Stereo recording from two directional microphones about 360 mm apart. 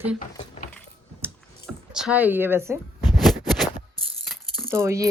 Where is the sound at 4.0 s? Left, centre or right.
Centre.